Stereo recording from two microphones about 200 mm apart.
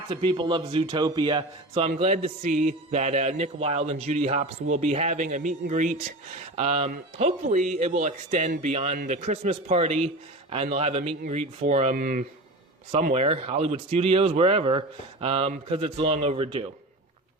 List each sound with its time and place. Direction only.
0.1 s a man's voice: 25° right (ahead or behind)